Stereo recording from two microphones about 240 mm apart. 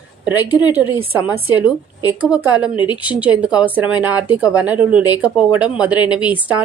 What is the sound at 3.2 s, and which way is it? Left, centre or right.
A woman's voice, centre.